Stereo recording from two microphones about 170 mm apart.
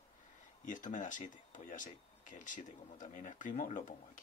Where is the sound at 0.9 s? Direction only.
50° left (ahead or behind).